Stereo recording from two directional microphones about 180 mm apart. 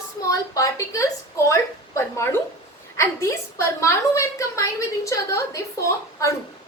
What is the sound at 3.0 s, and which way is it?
A woman's voice, 15° left (ahead or behind).